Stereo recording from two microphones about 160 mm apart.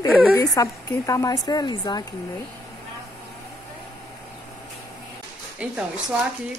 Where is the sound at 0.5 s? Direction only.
20° left (ahead or behind).